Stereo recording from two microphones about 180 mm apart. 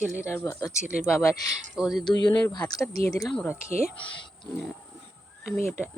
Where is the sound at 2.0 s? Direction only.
25° left (ahead or behind).